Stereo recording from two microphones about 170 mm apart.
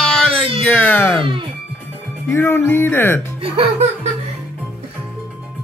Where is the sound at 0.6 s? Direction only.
10° left (ahead or behind).